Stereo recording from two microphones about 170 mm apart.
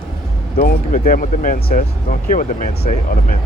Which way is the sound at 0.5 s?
55° left (ahead or behind).